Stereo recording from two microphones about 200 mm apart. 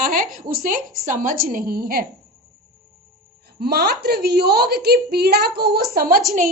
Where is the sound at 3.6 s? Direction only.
50° right (ahead or behind).